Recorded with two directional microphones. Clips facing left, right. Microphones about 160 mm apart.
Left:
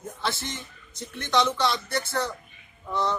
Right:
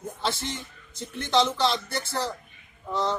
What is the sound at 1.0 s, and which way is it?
A man's voice, 25° right (ahead or behind).